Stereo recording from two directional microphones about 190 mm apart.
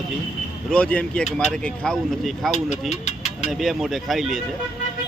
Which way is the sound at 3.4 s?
Centre (ahead or behind).